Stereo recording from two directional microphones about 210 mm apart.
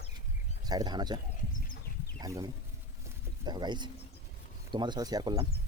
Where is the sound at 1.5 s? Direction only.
45° left (ahead or behind).